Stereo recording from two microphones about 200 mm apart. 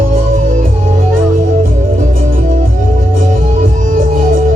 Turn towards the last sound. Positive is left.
turn(degrees=-45)  # may be behind; listen again after turning